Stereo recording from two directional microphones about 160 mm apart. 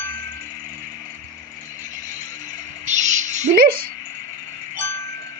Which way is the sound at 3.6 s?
65° right (ahead or behind).